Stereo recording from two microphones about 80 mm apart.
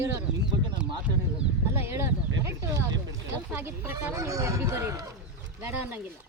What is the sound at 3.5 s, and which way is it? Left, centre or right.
Speech, right.